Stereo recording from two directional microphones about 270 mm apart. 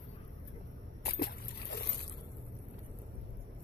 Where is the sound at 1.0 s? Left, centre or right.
Left.